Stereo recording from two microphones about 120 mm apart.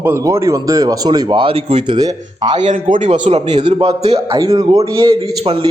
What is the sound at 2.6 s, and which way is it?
A man's voice, 90° right.